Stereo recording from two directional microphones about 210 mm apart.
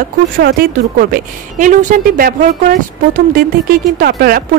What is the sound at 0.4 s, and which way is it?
A woman's voice, 45° right (ahead or behind).